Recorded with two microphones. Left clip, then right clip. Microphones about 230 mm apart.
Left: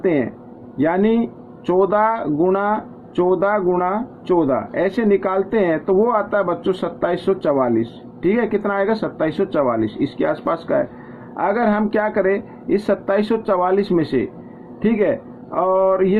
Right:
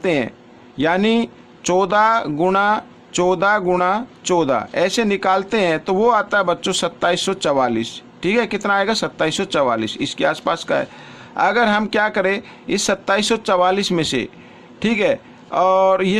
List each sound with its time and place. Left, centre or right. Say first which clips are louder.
0.0 s speech: even; right